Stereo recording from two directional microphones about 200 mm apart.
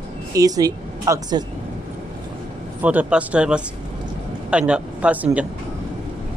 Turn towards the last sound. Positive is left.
turn(degrees=-5)  # may be behind; listen again after turning